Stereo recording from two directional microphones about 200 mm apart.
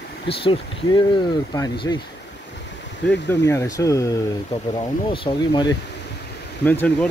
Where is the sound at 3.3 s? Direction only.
15° left (ahead or behind).